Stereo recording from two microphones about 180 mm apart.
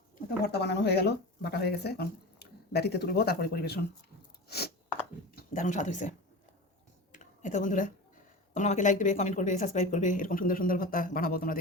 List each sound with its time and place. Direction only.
0.4 s speech: 65° left (ahead or behind)
4.4 s chewing: 65° left (ahead or behind)
5.3 s speech: 50° left (ahead or behind)
7.1 s a sound: 45° left (ahead or behind)
8.5 s a woman's voice: 40° left (ahead or behind)